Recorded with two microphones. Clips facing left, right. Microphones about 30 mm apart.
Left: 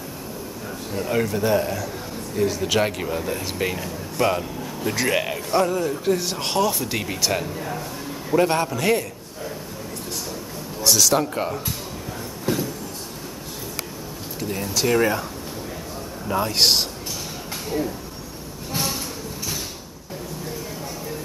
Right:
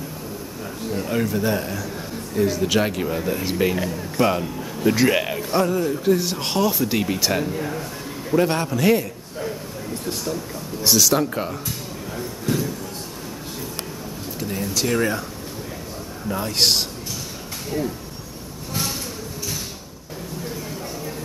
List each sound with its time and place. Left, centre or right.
0.9 s speech: centre
11.0 s speech: centre
12.2 s a sound: centre
14.4 s speech: centre
16.3 s speech: centre
17.7 s speech: centre
18.7 s a sound: centre